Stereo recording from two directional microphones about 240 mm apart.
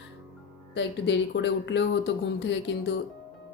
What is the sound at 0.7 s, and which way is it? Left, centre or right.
A woman's voice, left.